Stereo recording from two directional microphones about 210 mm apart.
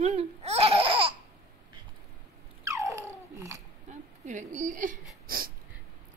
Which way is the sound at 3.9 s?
35° right (ahead or behind).